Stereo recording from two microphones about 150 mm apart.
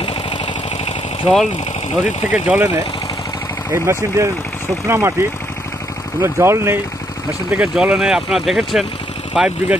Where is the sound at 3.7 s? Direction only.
20° right (ahead or behind).